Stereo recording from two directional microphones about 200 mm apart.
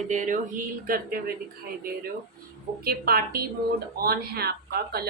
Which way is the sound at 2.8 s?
50° right (ahead or behind).